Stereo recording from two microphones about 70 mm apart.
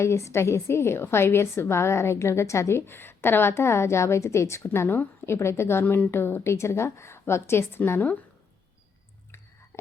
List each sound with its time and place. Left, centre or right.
0.0 s a woman's voice: left
7.8 s a woman's voice: left
9.7 s a sound: left